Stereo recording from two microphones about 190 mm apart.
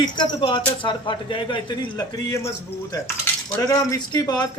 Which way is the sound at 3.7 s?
20° left (ahead or behind).